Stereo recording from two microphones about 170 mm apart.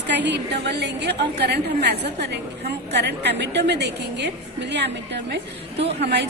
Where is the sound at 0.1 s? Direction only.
90° right.